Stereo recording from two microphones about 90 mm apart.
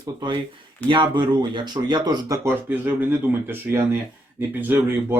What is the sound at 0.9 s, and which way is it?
Speech, 65° right (ahead or behind).